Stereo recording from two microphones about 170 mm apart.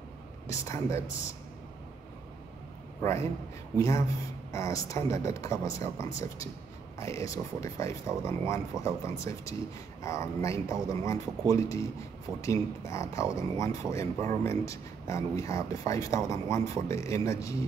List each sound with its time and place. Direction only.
0.5 s speech: 15° left (ahead or behind)
3.0 s a man's voice: 15° left (ahead or behind)